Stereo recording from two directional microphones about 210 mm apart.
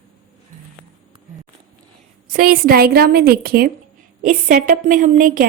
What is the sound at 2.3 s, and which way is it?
A woman's voice, 45° right (ahead or behind).